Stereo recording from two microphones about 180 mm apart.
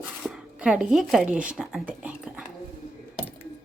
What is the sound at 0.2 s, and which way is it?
Speech, 5° right (ahead or behind).